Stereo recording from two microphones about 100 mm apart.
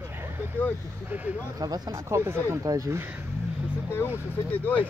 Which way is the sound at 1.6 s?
40° right (ahead or behind).